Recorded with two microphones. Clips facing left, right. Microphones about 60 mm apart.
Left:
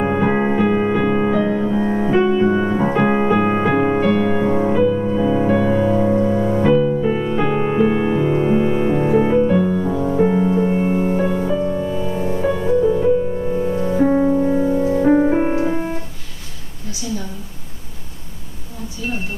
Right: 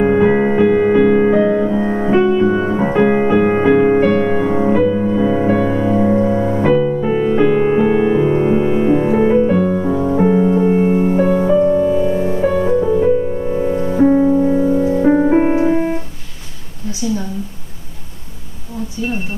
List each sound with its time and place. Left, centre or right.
0.0 s music: centre
1.3 s music: right
2.1 s music: centre; by 10.0 s right
10.0 s music: centre